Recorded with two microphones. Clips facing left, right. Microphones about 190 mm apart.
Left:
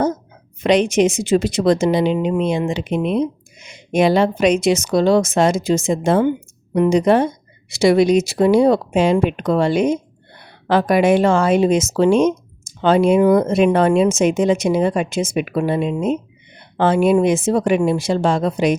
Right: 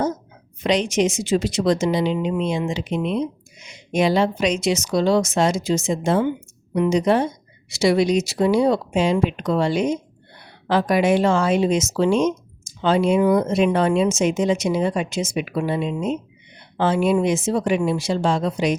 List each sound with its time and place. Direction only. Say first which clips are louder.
0.6 s speech: left 5 dB; 55° left (ahead or behind)